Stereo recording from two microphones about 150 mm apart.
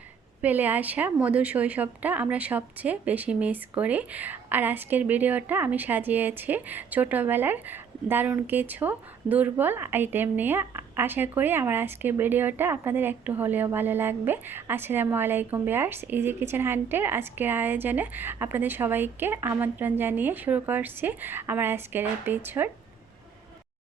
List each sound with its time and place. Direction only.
0.4 s a woman's voice: 10° right (ahead or behind)